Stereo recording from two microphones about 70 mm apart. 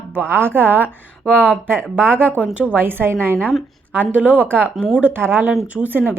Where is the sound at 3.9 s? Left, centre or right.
Right.